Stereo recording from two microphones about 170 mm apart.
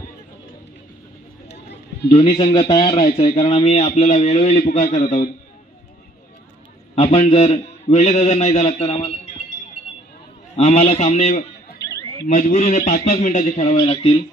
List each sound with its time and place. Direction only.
1.7 s a man's voice: 35° left (ahead or behind)
7.0 s a man's voice: 35° left (ahead or behind)
10.5 s a man's voice: 40° left (ahead or behind)
11.8 s a sound: 20° left (ahead or behind)
12.3 s speech: 45° left (ahead or behind)
13.7 s speech: 30° left (ahead or behind)